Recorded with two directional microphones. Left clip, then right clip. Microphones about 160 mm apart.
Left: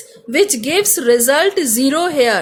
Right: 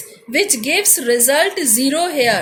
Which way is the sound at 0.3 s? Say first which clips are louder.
Left 2 dB; 60° left (ahead or behind).